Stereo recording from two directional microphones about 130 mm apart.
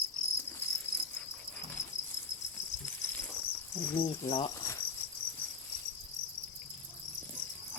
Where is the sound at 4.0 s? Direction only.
45° left (ahead or behind).